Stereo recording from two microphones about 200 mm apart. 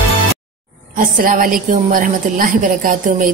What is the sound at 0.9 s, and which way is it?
A woman's voice, 45° right (ahead or behind).